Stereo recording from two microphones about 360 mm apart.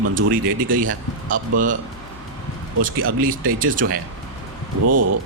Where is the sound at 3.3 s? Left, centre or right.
Right.